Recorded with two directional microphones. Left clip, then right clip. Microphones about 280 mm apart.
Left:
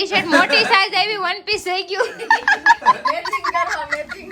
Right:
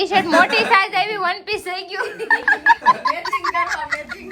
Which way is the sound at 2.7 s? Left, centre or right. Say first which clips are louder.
Even; centre.